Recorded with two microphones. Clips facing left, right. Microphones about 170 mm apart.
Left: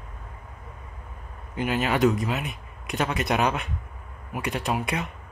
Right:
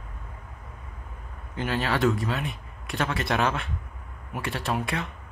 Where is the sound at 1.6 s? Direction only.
20° left (ahead or behind).